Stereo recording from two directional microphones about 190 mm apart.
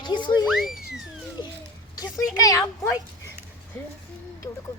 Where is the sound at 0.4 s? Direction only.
Centre (ahead or behind).